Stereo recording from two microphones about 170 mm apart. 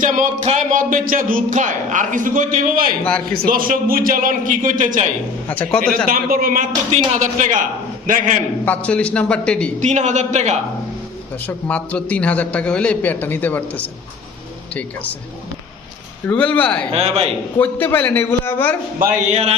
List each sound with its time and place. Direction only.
0.0 s speech: 45° right (ahead or behind)
3.0 s a man's voice: 5° left (ahead or behind)
3.3 s a man's voice: 55° right (ahead or behind)
5.5 s a man's voice: 5° left (ahead or behind)
6.1 s a man's voice: 60° right (ahead or behind)
8.6 s a man's voice: 10° left (ahead or behind)
9.8 s speech: 45° right (ahead or behind)
11.3 s a man's voice: 10° left (ahead or behind)
16.3 s a man's voice: 10° left (ahead or behind)
16.9 s a man's voice: 35° right (ahead or behind)
17.6 s a man's voice: 10° left (ahead or behind)
19.3 s a man's voice: 40° right (ahead or behind)